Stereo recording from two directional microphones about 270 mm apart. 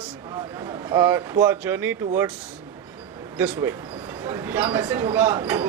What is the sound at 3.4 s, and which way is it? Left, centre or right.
A man's voice, centre.